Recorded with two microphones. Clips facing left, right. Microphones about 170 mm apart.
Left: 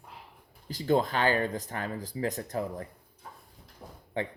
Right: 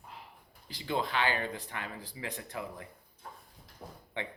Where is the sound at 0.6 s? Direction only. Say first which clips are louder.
Left 8 dB; 45° left (ahead or behind).